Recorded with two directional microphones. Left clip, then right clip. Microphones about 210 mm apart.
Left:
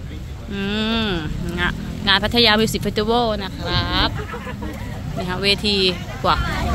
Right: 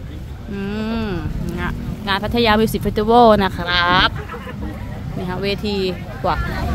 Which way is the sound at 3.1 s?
35° right (ahead or behind).